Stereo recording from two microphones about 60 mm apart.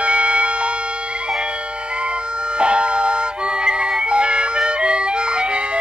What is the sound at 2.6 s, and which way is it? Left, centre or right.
Music, centre.